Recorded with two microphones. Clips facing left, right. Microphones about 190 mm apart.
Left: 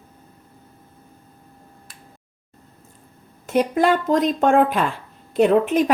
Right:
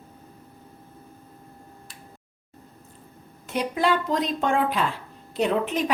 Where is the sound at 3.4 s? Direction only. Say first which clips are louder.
Left 6 dB; 45° left (ahead or behind).